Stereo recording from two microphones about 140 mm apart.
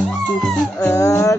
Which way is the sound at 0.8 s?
20° left (ahead or behind).